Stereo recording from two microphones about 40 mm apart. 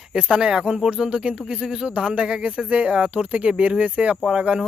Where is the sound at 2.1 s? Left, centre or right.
Right.